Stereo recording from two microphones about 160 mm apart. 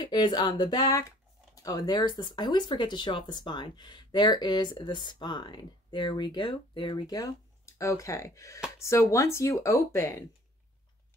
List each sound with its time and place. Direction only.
0.0 s speech: 25° left (ahead or behind)